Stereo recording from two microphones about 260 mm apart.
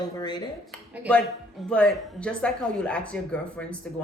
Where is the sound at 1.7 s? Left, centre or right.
Centre.